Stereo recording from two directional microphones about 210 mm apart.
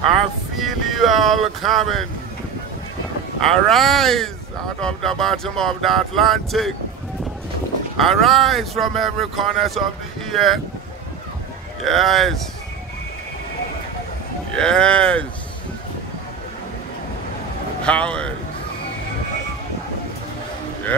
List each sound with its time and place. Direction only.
0.6 s speech: centre (ahead or behind)
3.3 s speech: centre (ahead or behind)
8.0 s speech: centre (ahead or behind)
11.8 s speech: centre (ahead or behind)
14.5 s speech: 5° left (ahead or behind)
17.8 s speech: 5° left (ahead or behind)